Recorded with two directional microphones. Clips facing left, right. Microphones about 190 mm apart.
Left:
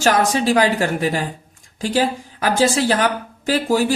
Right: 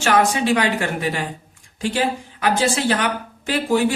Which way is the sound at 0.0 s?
40° left (ahead or behind).